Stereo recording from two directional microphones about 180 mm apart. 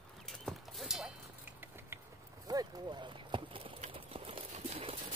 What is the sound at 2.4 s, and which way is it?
Clip-clop, 25° right (ahead or behind).